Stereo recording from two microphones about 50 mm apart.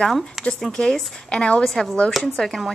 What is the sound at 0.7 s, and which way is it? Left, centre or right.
A woman's voice, centre.